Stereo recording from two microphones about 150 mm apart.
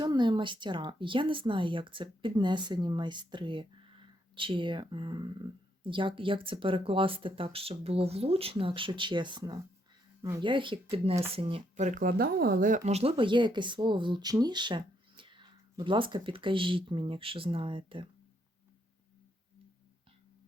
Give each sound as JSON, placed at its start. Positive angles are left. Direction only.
{"t": 0.0, "sound": "speech", "side_deg": -30}
{"t": 11.8, "sound": "speech", "side_deg": -60}